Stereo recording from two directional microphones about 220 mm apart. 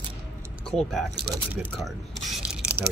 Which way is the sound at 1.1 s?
50° right (ahead or behind).